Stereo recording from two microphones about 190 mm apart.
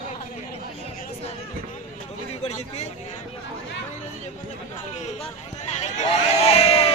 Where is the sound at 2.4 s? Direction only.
35° left (ahead or behind).